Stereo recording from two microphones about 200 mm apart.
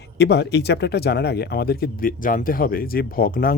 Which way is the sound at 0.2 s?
60° left (ahead or behind).